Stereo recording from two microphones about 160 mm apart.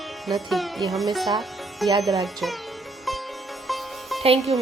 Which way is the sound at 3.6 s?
Centre (ahead or behind).